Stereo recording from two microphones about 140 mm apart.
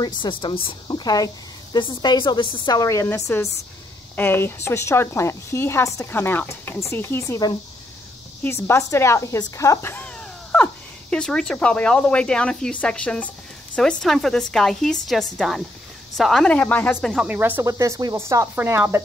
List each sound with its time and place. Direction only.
0.2 s a woman's voice: 35° left (ahead or behind); by 17.1 s 10° left (ahead or behind)
17.1 s a woman's voice: 5° right (ahead or behind)
17.4 s speech: 15° right (ahead or behind)